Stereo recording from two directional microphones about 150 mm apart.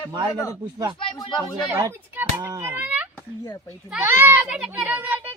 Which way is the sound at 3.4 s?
20° left (ahead or behind).